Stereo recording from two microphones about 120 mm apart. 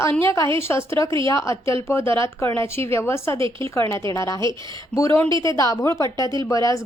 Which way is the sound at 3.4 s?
45° right (ahead or behind).